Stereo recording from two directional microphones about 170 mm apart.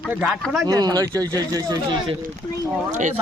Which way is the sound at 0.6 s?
25° right (ahead or behind).